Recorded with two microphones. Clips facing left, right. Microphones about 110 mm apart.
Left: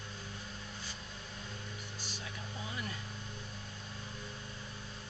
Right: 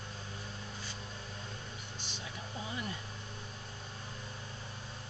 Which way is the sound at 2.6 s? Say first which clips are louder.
Right 2 dB; 25° right (ahead or behind).